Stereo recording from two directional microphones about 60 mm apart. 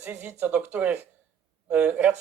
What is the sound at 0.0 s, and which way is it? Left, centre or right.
Speech, right.